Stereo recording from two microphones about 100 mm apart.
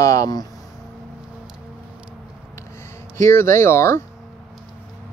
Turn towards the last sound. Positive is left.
turn(degrees=25)  # may be behind; listen again after turning